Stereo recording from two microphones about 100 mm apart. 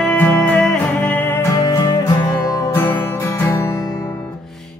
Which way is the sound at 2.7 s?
20° left (ahead or behind).